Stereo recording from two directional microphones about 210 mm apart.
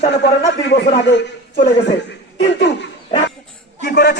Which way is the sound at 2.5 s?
55° left (ahead or behind).